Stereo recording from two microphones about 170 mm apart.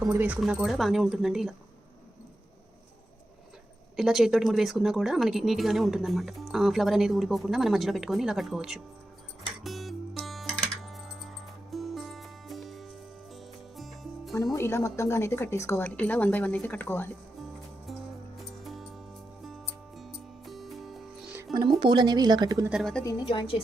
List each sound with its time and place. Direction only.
0.1 s speech: 10° right (ahead or behind)
3.9 s speech: centre (ahead or behind)
9.6 s music: centre (ahead or behind)
14.5 s a woman's voice: 15° left (ahead or behind)
18.6 s music: centre (ahead or behind)
21.5 s speech: 25° right (ahead or behind)
22.7 s speech: centre (ahead or behind)
23.0 s a woman's voice: 25° left (ahead or behind)